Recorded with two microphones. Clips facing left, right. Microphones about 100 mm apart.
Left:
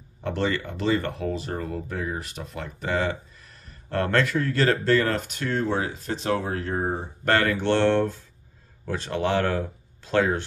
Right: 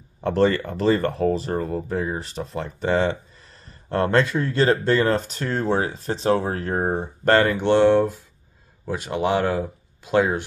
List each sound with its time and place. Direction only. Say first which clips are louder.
0.2 s speech: right 7 dB; 40° right (ahead or behind)
7.4 s speech: right 4 dB; 15° right (ahead or behind)